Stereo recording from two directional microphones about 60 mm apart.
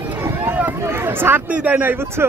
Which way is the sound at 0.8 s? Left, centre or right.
Right.